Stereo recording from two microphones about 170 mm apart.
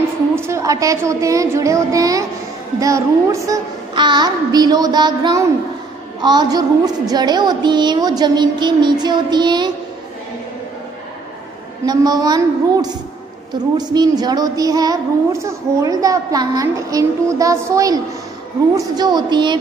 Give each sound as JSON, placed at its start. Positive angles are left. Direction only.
{"t": 0.4, "sound": "a woman's voice", "side_deg": -15}
{"t": 11.8, "sound": "a woman's voice", "side_deg": -25}